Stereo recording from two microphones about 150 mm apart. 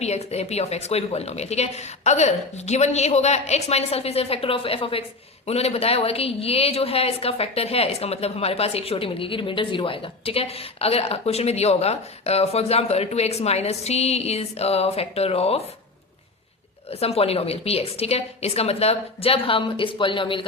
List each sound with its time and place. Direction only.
0.0 s speech: 45° left (ahead or behind)
16.9 s a woman's voice: 40° left (ahead or behind)